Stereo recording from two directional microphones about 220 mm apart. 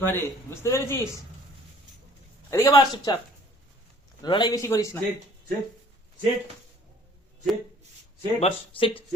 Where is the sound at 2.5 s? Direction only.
15° left (ahead or behind).